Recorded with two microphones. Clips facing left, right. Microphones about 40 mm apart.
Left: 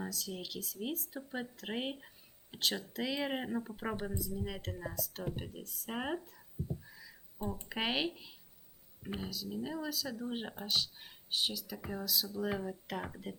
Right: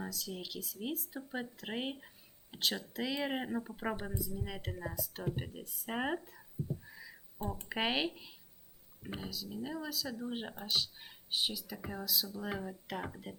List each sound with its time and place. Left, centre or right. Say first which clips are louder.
0.0 s speech: left 1 dB; centre
7.0 s a sound: even; right
7.5 s speech: right 1 dB; centre